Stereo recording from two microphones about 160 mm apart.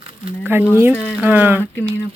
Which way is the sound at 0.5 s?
15° right (ahead or behind).